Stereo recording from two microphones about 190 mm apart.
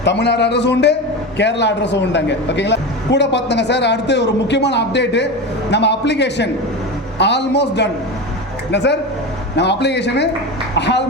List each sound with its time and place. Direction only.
0.0 s speech: 65° left (ahead or behind)